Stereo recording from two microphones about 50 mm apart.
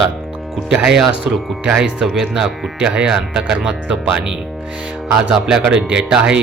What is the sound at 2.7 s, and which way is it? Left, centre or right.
Speech, right.